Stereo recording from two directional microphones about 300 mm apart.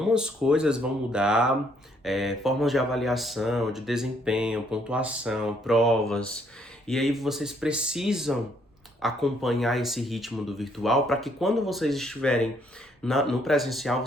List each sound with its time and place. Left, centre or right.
0.0 s speech: centre